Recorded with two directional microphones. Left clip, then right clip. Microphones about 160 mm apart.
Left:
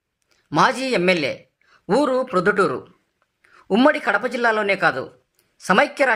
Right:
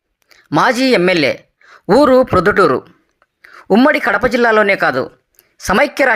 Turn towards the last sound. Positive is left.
turn(degrees=-35)  # may be behind; listen again after turning